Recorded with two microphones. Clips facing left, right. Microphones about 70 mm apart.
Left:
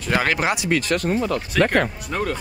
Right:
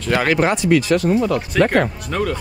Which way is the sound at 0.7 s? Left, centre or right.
Left.